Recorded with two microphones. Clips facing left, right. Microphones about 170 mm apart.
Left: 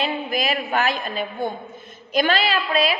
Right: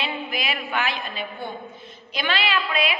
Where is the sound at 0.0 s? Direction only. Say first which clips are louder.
Left 5 dB; 40° left (ahead or behind).